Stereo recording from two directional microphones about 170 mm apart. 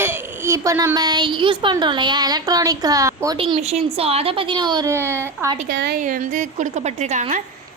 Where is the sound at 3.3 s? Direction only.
35° right (ahead or behind); by 5.6 s 15° right (ahead or behind).